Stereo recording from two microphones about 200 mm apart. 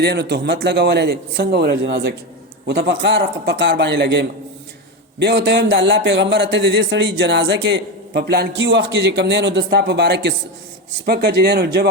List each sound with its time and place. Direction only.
0.0 s speech: 55° right (ahead or behind)